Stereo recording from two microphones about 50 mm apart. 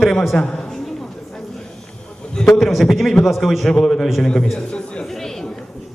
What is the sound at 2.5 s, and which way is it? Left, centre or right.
A man's voice, centre.